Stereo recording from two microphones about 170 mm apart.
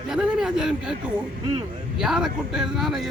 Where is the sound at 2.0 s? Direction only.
5° right (ahead or behind).